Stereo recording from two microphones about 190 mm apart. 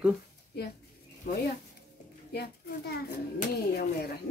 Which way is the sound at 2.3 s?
60° left (ahead or behind).